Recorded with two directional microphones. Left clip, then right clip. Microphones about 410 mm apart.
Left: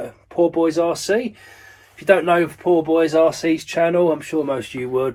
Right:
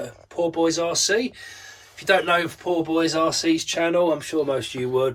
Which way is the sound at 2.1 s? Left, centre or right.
Centre.